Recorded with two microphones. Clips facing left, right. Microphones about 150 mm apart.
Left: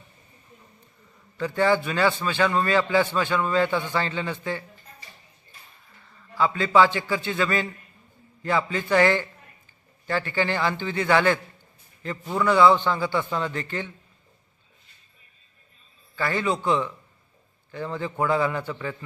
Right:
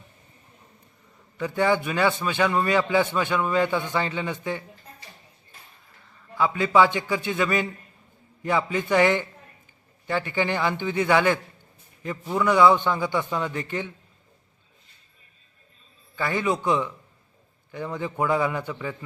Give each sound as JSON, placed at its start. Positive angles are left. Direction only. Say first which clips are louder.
{"t": 1.4, "sound": "a man's voice", "louder": "left 1 dB", "side_deg": -15}
{"t": 6.3, "sound": "a man's voice", "louder": "even", "side_deg": -15}
{"t": 16.1, "sound": "a man's voice", "louder": "even", "side_deg": -15}